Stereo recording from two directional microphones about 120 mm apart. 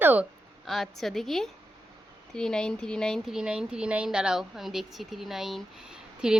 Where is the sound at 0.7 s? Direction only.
Centre (ahead or behind).